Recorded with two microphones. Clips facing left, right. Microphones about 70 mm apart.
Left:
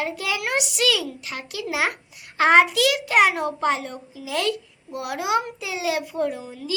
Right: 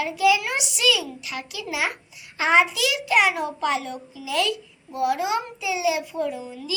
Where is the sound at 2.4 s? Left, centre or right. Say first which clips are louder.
Left 3 dB; left.